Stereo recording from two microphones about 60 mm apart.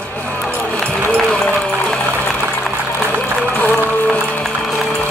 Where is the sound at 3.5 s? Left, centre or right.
Left.